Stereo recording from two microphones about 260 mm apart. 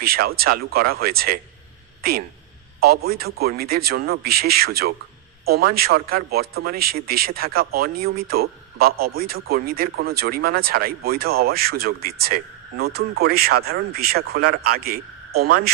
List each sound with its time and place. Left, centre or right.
0.0 s speech: right